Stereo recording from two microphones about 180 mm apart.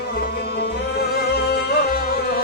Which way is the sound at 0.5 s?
65° left (ahead or behind).